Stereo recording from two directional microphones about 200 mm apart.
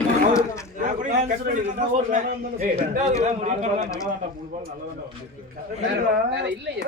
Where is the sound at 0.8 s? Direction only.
40° right (ahead or behind).